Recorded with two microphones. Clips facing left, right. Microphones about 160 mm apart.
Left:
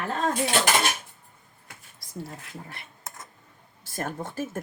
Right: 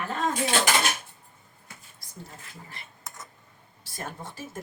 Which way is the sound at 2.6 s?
60° left (ahead or behind).